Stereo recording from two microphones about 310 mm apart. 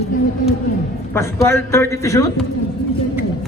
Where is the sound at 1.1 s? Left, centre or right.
Centre.